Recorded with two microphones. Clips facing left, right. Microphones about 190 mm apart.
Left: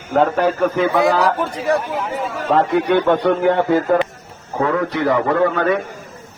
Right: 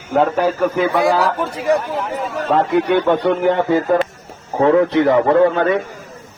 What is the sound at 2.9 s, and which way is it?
Speech, 10° right (ahead or behind).